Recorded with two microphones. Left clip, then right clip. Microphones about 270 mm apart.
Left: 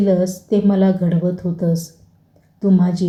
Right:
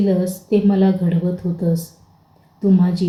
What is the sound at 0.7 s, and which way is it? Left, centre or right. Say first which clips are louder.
Speech: left 1 dB; centre.